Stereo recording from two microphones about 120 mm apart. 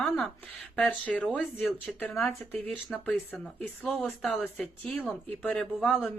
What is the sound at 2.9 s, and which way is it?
Speech, centre (ahead or behind).